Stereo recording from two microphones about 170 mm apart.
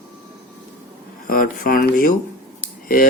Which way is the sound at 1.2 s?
55° left (ahead or behind).